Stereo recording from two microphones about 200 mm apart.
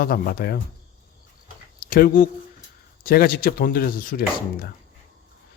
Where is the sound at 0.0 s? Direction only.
50° left (ahead or behind).